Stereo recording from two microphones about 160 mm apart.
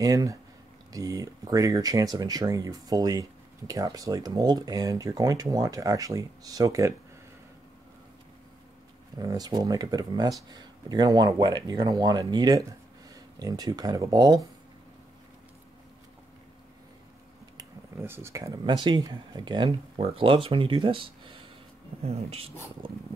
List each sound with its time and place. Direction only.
0.0 s speech: 20° right (ahead or behind)
9.2 s speech: 25° right (ahead or behind)
17.6 s speech: 15° right (ahead or behind); by 22.8 s 40° right (ahead or behind)